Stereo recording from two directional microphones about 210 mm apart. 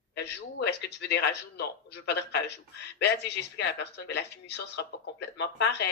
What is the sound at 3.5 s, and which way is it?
Speech, 55° left (ahead or behind).